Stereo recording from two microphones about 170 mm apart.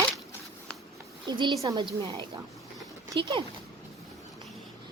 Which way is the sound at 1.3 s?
25° right (ahead or behind).